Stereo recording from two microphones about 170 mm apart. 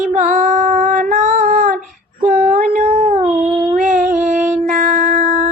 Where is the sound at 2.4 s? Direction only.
60° right (ahead or behind).